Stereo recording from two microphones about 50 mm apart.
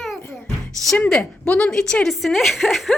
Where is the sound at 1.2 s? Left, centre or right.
Left.